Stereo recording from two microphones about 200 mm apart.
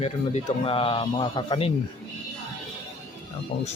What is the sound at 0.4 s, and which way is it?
Speech, 25° left (ahead or behind).